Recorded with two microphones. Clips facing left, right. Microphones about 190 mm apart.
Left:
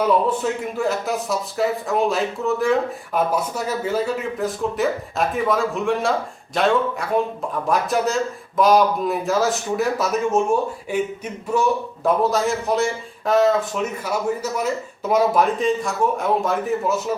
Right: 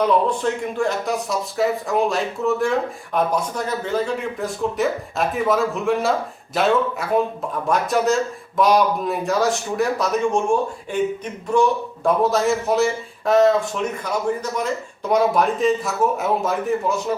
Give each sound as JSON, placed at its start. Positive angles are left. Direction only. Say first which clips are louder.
{"t": 0.0, "sound": "a man's voice", "louder": "even", "side_deg": 5}
{"t": 7.7, "sound": "a man's voice", "louder": "right 2 dB", "side_deg": 0}